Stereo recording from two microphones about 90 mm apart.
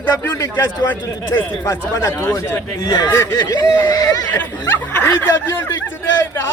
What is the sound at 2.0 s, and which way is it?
Speech, 25° left (ahead or behind).